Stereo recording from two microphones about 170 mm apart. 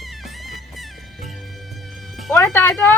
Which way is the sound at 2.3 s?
15° left (ahead or behind).